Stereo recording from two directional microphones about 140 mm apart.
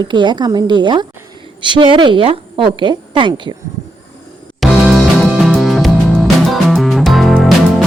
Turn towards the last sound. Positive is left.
turn(degrees=0)  # may be behind; listen again after turning